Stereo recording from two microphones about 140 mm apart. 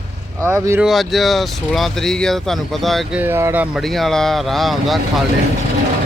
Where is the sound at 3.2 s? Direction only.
15° right (ahead or behind).